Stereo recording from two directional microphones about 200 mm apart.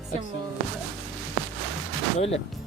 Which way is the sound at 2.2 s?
30° left (ahead or behind).